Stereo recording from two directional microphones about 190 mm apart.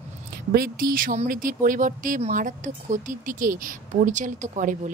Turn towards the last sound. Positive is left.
turn(degrees=-40)  # may be behind; listen again after turning